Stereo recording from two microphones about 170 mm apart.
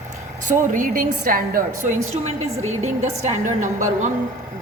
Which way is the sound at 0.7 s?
50° right (ahead or behind).